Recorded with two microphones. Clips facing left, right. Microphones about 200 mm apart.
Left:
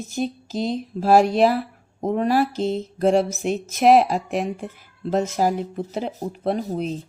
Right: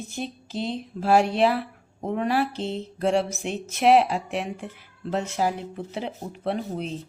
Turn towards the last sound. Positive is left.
turn(degrees=40)  # may be behind; listen again after turning